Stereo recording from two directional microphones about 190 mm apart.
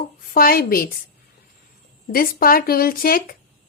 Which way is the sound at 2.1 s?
50° left (ahead or behind).